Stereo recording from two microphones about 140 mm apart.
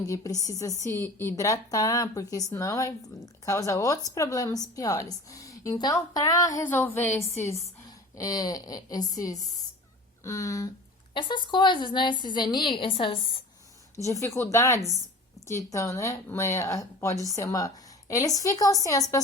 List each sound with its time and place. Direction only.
0.0 s a woman's voice: 25° left (ahead or behind)
11.1 s a woman's voice: 35° left (ahead or behind)
13.9 s a woman's voice: 20° left (ahead or behind)